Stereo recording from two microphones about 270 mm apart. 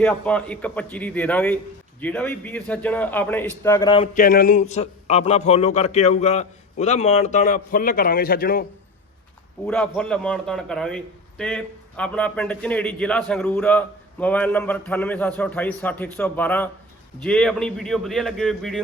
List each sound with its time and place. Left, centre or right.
0.0 s a man's voice: centre; by 8.6 s left
9.6 s a man's voice: centre